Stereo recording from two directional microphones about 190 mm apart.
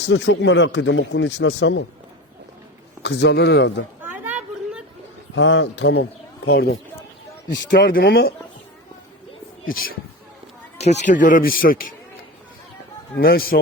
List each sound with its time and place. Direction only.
0.1 s speech: 70° left (ahead or behind)
3.0 s a man's voice: 65° left (ahead or behind)
4.0 s chatter: 10° right (ahead or behind)
5.3 s speech: 80° left; by 6.7 s 60° left (ahead or behind)
7.8 s speech: 50° left (ahead or behind)
9.6 s speech: 50° left (ahead or behind)
10.8 s speech: 35° left (ahead or behind)
13.1 s speech: 50° left (ahead or behind)